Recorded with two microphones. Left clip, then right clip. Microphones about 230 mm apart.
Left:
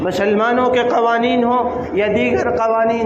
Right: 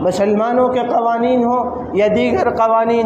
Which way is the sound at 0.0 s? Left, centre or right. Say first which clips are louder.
Right 1 dB; right.